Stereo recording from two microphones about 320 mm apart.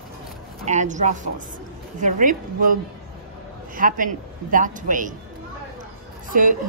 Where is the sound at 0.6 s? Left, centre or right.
Right.